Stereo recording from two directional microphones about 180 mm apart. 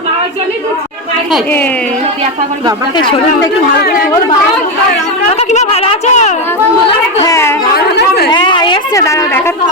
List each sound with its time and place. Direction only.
3.0 s speech: 25° left (ahead or behind)
3.8 s speech: 60° left (ahead or behind)
5.4 s speech: 35° left (ahead or behind)
7.3 s a sound: 15° left (ahead or behind)
7.6 s chatter: 65° left (ahead or behind)
8.3 s a sound: 25° left (ahead or behind)